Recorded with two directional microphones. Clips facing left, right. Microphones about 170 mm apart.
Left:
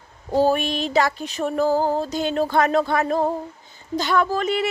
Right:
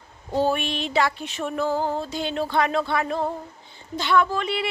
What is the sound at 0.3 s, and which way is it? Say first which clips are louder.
Music: left 4 dB; 40° left (ahead or behind).